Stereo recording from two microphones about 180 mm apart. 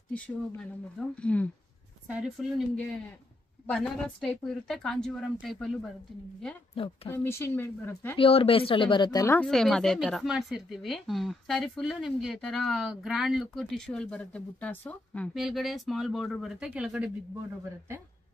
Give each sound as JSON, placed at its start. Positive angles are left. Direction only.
{"t": 0.1, "sound": "speech", "side_deg": 5}
{"t": 2.0, "sound": "speech", "side_deg": -5}
{"t": 6.7, "sound": "speech", "side_deg": 30}
{"t": 7.1, "sound": "speech", "side_deg": 15}
{"t": 8.2, "sound": "speech", "side_deg": 30}
{"t": 9.4, "sound": "speech", "side_deg": 0}